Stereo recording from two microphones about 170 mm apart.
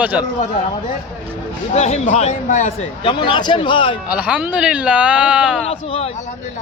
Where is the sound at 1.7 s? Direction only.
40° left (ahead or behind).